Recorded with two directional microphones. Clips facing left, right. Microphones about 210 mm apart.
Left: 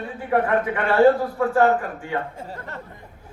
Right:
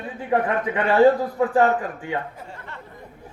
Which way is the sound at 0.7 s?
15° right (ahead or behind).